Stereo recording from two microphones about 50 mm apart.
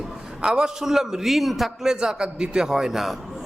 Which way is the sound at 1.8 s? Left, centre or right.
Centre.